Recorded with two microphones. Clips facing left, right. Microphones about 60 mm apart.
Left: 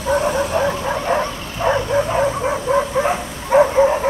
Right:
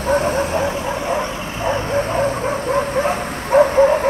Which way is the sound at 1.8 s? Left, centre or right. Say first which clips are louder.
Left 1 dB; right.